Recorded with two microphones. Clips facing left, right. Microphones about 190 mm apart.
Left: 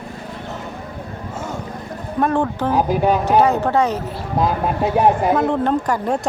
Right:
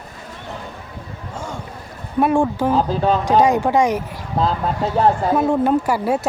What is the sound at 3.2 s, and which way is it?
Speech, 15° right (ahead or behind).